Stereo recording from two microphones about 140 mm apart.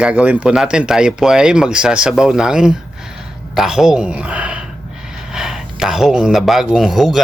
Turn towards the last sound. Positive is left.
turn(degrees=0)  # may be behind; listen again after turning